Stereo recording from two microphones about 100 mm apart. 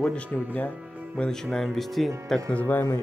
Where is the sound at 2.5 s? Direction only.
15° left (ahead or behind).